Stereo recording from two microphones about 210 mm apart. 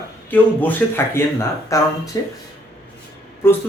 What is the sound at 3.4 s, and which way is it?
Speech, 10° left (ahead or behind).